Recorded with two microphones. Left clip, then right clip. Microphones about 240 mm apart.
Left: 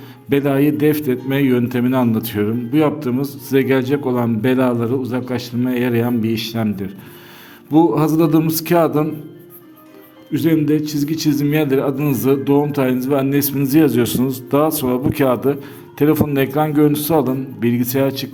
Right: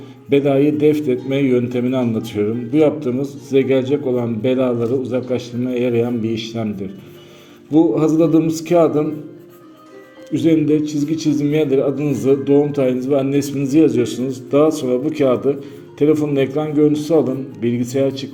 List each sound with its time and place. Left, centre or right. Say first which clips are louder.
0.3 s a man's voice: right 2 dB; left
10.3 s a man's voice: right 1 dB; left